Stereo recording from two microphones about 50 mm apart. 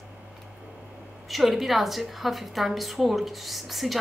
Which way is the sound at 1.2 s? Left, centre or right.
Centre.